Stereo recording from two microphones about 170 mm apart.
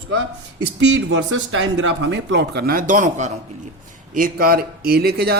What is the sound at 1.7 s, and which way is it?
Speech, 90° right.